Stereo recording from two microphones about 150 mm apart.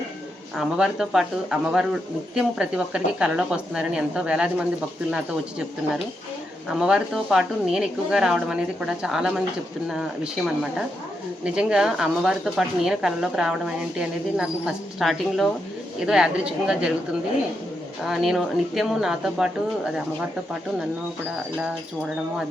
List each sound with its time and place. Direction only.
0.5 s speech: 5° right (ahead or behind)
6.7 s speech: 5° right (ahead or behind)
18.1 s speech: centre (ahead or behind)